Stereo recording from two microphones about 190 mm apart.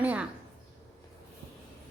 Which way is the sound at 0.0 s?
10° right (ahead or behind).